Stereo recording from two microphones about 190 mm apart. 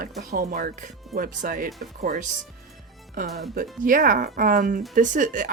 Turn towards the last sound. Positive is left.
turn(degrees=-45)  # may be behind; listen again after turning